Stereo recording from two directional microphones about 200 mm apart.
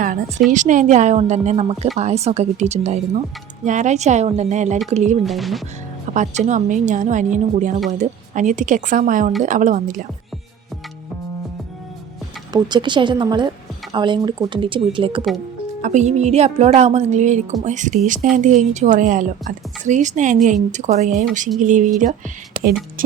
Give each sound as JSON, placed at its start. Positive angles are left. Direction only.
{"t": 0.0, "sound": "a woman's voice", "side_deg": -40}
{"t": 5.2, "sound": "speech", "side_deg": 0}
{"t": 6.1, "sound": "a woman's voice", "side_deg": -35}
{"t": 12.5, "sound": "speech", "side_deg": -20}
{"t": 15.8, "sound": "a woman's voice", "side_deg": -35}
{"t": 22.5, "sound": "a sound", "side_deg": -40}
{"t": 23.0, "sound": "speech", "side_deg": -45}